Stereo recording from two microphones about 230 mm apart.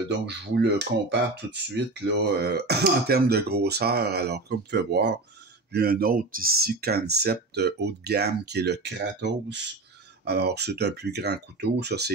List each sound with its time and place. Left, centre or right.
0.6 s speech: right